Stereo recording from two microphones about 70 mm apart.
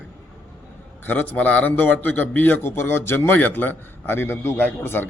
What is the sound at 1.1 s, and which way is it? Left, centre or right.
A man's voice, left.